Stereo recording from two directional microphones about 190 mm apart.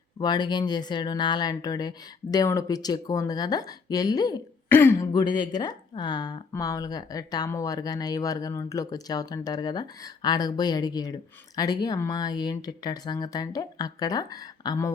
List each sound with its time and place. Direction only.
0.2 s speech: 20° left (ahead or behind)